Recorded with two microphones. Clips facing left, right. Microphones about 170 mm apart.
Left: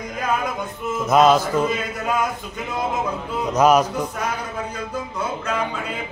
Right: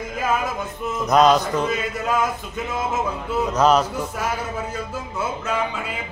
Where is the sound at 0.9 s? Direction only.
5° left (ahead or behind).